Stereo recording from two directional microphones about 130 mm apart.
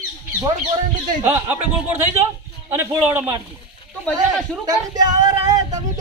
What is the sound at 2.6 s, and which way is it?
Speech, 15° right (ahead or behind).